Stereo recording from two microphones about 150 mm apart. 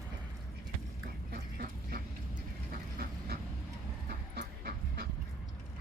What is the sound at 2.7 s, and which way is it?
Train, 85° right.